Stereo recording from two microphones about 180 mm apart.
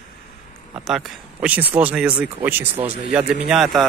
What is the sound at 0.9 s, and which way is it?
Speech, centre (ahead or behind).